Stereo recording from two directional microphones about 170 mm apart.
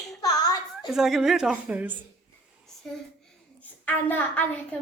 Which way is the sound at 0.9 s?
Centre (ahead or behind).